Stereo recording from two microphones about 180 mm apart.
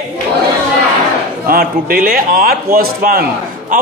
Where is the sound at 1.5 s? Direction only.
55° right (ahead or behind).